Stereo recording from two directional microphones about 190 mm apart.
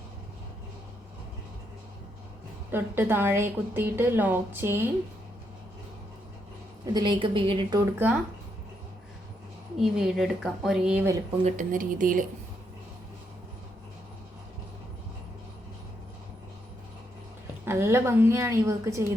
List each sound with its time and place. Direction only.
2.7 s a woman's voice: 10° right (ahead or behind)
6.9 s a woman's voice: 25° right (ahead or behind)
9.8 s a woman's voice: centre (ahead or behind)
11.4 s speech: 45° right (ahead or behind)
17.7 s a woman's voice: 15° right (ahead or behind)